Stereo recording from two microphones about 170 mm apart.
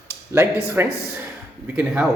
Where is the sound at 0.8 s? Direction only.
15° right (ahead or behind).